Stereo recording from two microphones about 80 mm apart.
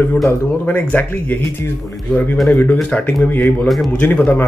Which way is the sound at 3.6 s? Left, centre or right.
Centre.